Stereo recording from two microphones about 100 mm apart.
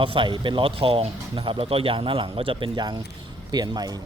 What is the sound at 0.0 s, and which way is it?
Speech, 60° right (ahead or behind).